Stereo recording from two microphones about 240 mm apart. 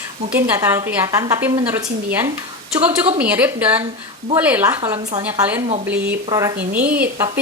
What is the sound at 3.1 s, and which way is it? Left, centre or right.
A woman's voice, centre.